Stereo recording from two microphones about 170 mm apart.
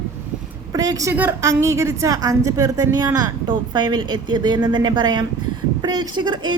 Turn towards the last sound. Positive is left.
turn(degrees=-25)  # may be behind; listen again after turning